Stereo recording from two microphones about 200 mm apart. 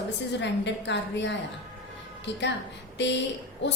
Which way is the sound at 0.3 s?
60° left (ahead or behind).